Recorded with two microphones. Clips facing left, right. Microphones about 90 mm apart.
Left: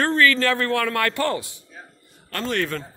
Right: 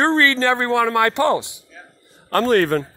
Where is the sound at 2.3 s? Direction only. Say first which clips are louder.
Right 9 dB; 45° right (ahead or behind).